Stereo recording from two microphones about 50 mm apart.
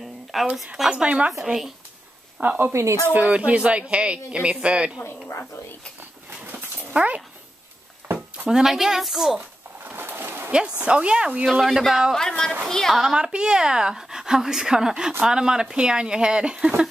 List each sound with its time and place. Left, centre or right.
0.3 s speech: centre
0.8 s speech: centre
1.4 s speech: centre
2.4 s speech: right
2.7 s speech: right
3.1 s speech: right
6.4 s dog: right
8.5 s speech: centre
9.8 s a sound: right
10.8 s speech: centre
11.6 s a man's voice: centre
12.2 s a woman's voice: centre
12.9 s speech: centre